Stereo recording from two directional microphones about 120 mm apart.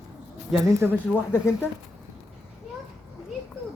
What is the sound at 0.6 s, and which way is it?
Speech, 25° right (ahead or behind).